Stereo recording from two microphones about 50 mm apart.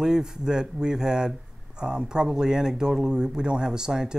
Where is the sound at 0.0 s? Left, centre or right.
Centre.